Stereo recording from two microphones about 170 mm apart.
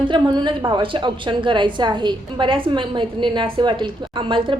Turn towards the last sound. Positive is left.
turn(degrees=-30)  # may be behind; listen again after turning